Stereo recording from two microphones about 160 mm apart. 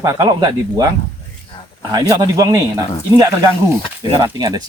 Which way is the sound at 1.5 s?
30° left (ahead or behind).